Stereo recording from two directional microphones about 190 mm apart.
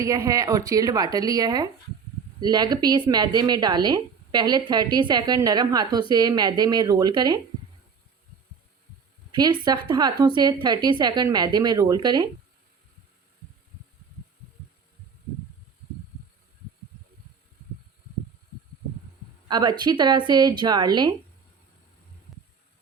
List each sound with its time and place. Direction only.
0.0 s a woman's voice: 15° right (ahead or behind)
9.3 s a woman's voice: 20° right (ahead or behind)
19.5 s a woman's voice: 20° right (ahead or behind)